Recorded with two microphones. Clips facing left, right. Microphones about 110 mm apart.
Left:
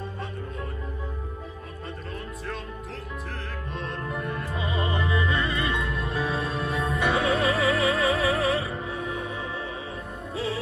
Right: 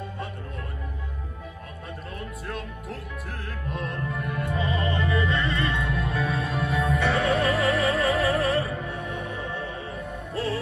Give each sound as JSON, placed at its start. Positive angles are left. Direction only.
{"t": 2.1, "sound": "music", "side_deg": -5}
{"t": 4.6, "sound": "music", "side_deg": 25}
{"t": 7.2, "sound": "music", "side_deg": 0}